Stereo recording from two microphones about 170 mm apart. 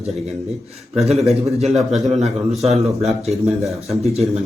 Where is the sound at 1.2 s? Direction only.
Centre (ahead or behind).